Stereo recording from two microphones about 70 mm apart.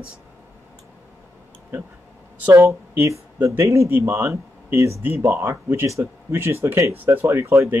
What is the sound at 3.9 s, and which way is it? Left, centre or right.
Speech, right.